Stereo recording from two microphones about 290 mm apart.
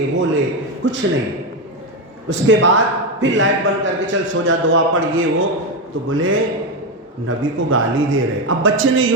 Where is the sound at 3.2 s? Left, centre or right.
Right.